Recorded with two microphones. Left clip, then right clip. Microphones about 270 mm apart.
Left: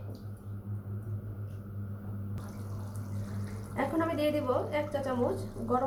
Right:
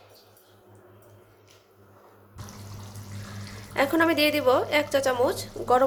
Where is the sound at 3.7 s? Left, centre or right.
Right.